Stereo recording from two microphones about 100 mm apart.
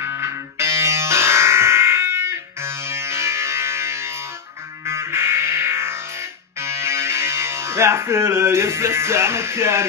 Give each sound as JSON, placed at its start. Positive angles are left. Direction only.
{"t": 0.0, "sound": "music", "side_deg": -30}